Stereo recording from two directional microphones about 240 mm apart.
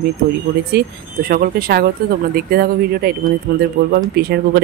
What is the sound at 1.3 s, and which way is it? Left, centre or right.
Speech, right.